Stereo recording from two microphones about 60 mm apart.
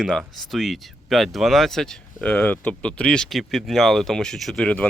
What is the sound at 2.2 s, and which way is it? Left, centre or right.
Speech, left.